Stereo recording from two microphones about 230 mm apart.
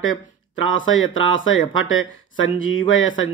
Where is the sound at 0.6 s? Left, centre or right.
Left.